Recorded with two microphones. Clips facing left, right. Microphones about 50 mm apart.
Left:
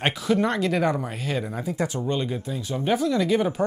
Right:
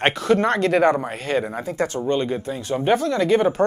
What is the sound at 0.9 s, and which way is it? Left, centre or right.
Speech, right.